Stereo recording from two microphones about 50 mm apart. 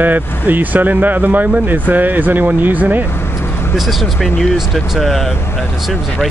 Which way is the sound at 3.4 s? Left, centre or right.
Left.